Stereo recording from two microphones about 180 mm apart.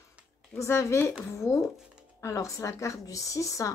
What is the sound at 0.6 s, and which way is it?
Speech, 15° left (ahead or behind).